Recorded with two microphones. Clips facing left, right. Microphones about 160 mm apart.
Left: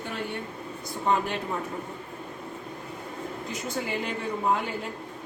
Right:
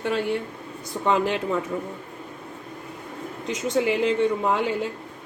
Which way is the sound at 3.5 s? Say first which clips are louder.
Right 10 dB; 90° right.